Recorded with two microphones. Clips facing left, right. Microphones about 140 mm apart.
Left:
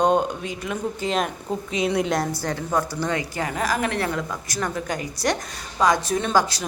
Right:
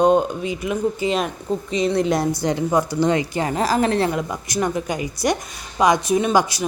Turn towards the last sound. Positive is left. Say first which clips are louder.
# right 3 dB
turn(degrees=-10)  # may be behind; listen again after turning